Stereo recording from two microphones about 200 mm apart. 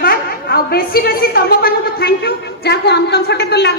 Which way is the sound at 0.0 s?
50° left (ahead or behind).